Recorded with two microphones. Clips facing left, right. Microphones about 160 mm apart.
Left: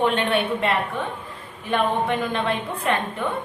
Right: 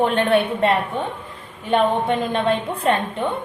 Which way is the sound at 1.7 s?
30° right (ahead or behind).